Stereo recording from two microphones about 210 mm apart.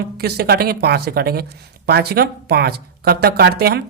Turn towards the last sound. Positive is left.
turn(degrees=-50)  # may be behind; listen again after turning